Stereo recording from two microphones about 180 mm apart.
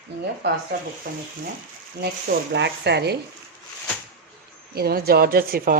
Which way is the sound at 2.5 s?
75° right (ahead or behind).